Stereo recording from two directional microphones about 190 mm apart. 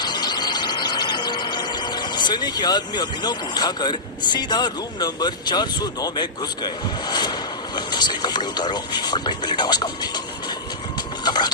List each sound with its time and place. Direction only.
0.0 s vehicle: 20° left (ahead or behind)
7.8 s speech: 25° left (ahead or behind)
11.2 s vehicle: 20° left (ahead or behind)